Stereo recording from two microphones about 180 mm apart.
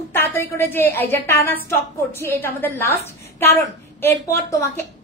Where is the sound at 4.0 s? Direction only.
15° left (ahead or behind).